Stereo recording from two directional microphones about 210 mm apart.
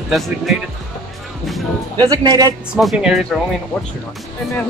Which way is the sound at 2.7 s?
Centre (ahead or behind).